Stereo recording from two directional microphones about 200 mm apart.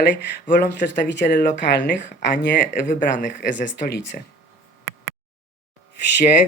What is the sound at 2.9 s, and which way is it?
Speech, 40° left (ahead or behind).